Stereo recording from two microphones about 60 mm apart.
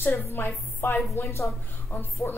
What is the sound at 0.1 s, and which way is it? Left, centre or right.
Speech, left.